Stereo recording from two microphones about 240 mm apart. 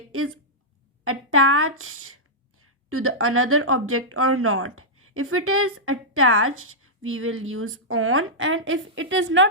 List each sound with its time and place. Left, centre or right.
0.1 s a woman's voice: right